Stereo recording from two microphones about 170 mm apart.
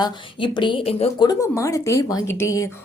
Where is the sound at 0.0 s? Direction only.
30° left (ahead or behind).